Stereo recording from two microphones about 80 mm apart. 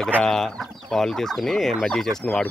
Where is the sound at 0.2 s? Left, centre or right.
Centre.